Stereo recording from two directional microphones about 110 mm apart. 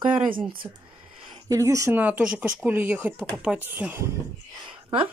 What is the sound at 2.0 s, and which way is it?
Speech, 15° right (ahead or behind).